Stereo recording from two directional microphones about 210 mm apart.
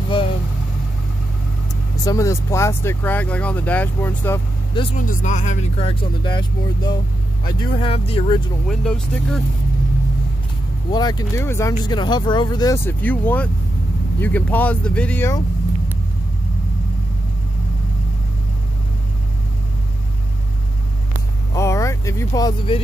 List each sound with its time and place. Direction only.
2.0 s speech: 15° left (ahead or behind)
4.9 s speech: 35° left (ahead or behind)
8.6 s speech: 5° left (ahead or behind)
10.9 s speech: 20° left (ahead or behind)
21.5 s a sound: 15° left (ahead or behind)